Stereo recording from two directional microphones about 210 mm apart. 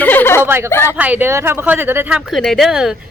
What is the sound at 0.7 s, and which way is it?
Speech, 10° left (ahead or behind).